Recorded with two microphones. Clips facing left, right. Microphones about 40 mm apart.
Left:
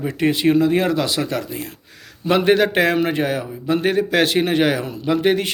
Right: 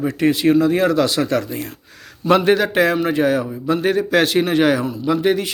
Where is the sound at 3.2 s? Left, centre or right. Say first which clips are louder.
Right 4 dB; centre.